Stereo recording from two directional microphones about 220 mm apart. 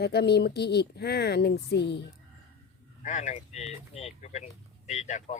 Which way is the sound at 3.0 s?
35° left (ahead or behind).